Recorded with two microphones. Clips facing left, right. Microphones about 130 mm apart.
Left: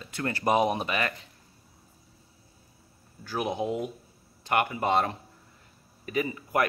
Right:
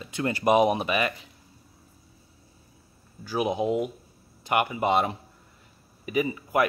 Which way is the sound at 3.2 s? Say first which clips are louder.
Right 4 dB; 10° right (ahead or behind).